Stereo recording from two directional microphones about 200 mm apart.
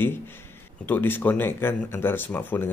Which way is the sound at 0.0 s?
10° left (ahead or behind).